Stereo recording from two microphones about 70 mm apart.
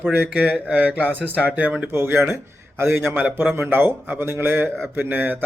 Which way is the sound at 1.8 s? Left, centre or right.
Right.